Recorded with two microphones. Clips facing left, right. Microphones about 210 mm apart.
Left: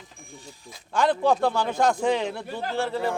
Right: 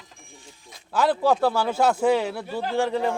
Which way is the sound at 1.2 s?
5° right (ahead or behind).